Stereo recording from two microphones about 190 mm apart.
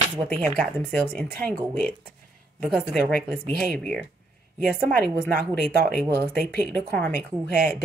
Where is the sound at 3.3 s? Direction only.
5° left (ahead or behind).